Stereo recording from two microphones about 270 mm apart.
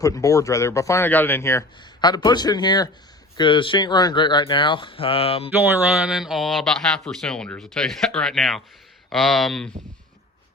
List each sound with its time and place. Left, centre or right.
0.0 s speech: centre
5.7 s a man's voice: centre